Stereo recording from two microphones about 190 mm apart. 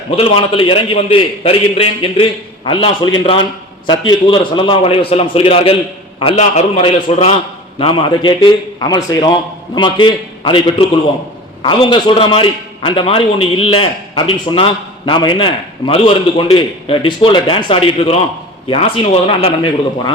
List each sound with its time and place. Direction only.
0.2 s a man's voice: 30° left (ahead or behind)